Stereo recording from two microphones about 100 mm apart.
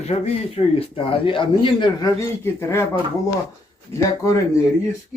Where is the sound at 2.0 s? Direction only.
35° left (ahead or behind).